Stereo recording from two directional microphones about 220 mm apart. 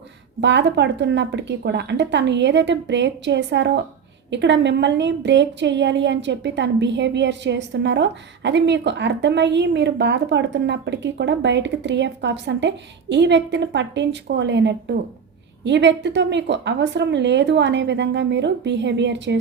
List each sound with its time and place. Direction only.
0.4 s a woman's voice: 55° right (ahead or behind)